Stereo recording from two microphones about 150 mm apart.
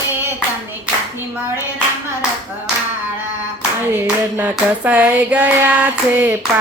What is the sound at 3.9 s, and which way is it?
Hands, 10° right (ahead or behind).